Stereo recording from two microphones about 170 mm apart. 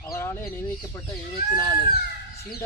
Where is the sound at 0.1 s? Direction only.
15° left (ahead or behind).